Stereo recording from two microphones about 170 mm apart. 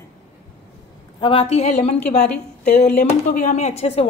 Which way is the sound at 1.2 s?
35° left (ahead or behind).